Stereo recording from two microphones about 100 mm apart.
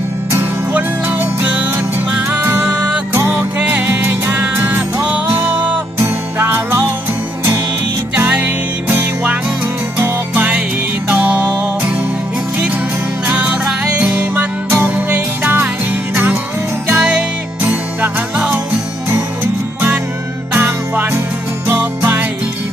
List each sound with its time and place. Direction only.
0.7 s music: 20° right (ahead or behind)
2.5 s music: 30° right (ahead or behind)
3.6 s music: 10° right (ahead or behind)
8.1 s music: 20° right (ahead or behind)
13.2 s music: 15° right (ahead or behind)
16.9 s music: 10° right (ahead or behind)
20.5 s music: 20° right (ahead or behind)